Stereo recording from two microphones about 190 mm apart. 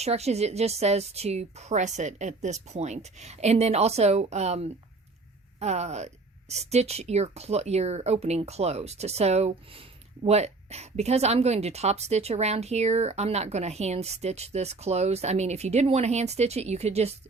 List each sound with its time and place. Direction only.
0.0 s speech: 35° right (ahead or behind)